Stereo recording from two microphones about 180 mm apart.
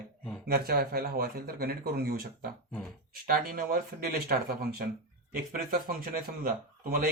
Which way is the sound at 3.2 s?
55° right (ahead or behind).